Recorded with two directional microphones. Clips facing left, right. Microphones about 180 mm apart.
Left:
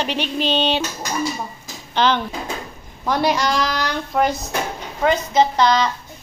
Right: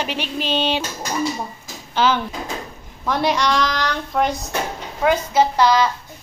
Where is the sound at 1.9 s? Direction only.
5° right (ahead or behind).